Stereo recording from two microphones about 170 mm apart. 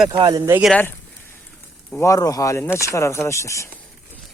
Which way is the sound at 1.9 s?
15° left (ahead or behind).